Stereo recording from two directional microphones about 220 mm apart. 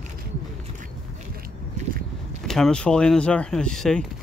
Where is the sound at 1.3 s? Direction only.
40° right (ahead or behind).